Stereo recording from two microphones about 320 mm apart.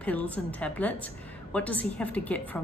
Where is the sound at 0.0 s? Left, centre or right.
Centre.